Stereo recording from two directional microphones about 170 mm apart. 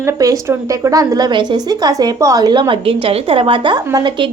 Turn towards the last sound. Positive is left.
turn(degrees=-25)  # may be behind; listen again after turning